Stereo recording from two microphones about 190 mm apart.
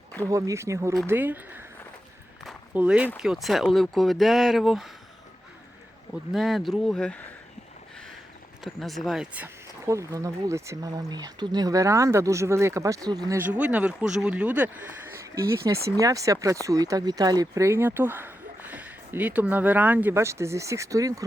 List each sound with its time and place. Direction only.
0.3 s speech: 15° right (ahead or behind)
2.5 s a sound: 5° right (ahead or behind)
3.2 s speech: centre (ahead or behind)
6.3 s speech: centre (ahead or behind)
8.6 s speech: centre (ahead or behind); by 21.2 s 15° right (ahead or behind)